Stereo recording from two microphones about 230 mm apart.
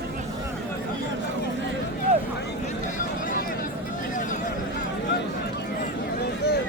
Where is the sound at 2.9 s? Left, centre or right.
Left.